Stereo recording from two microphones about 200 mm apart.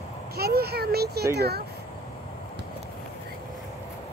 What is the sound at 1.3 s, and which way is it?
Speech, 55° right (ahead or behind).